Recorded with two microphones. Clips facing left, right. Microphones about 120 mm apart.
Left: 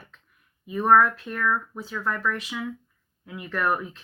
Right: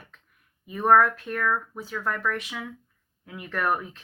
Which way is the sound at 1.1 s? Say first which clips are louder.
Even; 50° right (ahead or behind).